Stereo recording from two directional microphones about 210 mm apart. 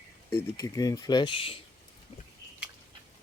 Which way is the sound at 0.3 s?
15° left (ahead or behind).